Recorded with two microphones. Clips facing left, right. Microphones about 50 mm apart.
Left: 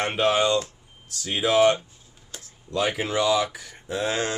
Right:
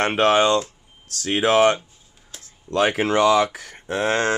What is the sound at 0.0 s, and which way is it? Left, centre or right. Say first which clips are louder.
Speech: right 5 dB; right.